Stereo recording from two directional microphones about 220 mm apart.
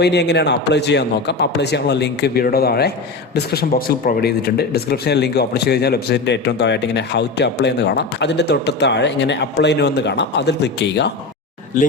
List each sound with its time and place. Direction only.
0.0 s speech: 50° left (ahead or behind)